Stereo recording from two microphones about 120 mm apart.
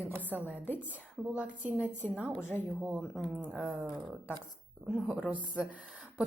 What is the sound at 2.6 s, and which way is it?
Speech, 5° right (ahead or behind).